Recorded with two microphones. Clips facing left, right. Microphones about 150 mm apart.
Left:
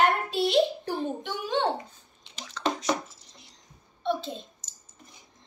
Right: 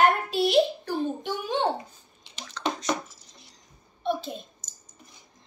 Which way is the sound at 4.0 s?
15° right (ahead or behind).